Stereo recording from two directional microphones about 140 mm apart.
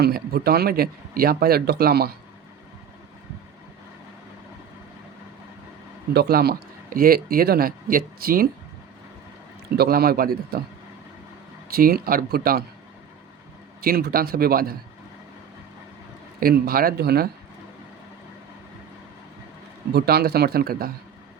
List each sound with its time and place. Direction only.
0.1 s speech: 90° right
6.2 s speech: 90° right
9.8 s speech: 90° right
11.7 s speech: 90° right
13.8 s speech: 90° right
16.4 s speech: 90° right
20.1 s speech: 90° right